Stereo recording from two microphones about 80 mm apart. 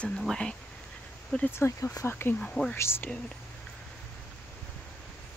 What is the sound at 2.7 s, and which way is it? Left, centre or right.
Speech, left.